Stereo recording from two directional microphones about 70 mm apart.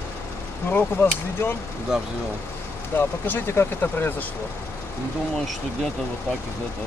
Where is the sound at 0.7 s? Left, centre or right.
Left.